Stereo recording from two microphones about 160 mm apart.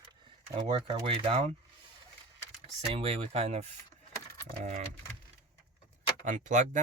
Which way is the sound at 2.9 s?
35° right (ahead or behind).